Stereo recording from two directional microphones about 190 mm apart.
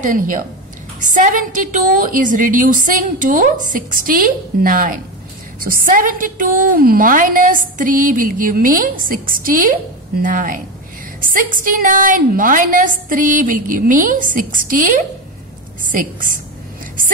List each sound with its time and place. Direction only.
0.0 s a woman's voice: 45° right (ahead or behind)